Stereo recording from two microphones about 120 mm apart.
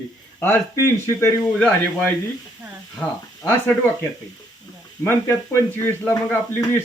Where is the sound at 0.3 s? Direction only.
20° left (ahead or behind).